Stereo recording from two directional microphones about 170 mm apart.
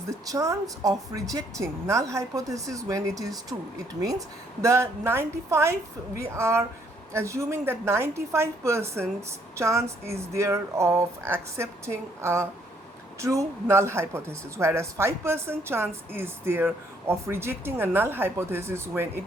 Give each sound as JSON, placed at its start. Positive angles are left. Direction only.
{"t": 0.1, "sound": "speech", "side_deg": -20}
{"t": 4.6, "sound": "speech", "side_deg": -15}